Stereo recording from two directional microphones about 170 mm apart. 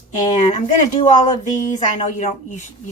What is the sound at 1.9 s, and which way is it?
Speech, 45° left (ahead or behind).